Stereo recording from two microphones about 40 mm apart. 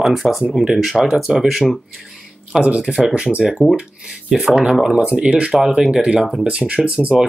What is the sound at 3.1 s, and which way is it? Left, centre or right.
Speech, right.